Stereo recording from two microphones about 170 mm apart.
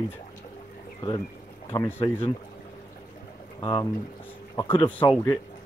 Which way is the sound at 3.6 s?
25° left (ahead or behind).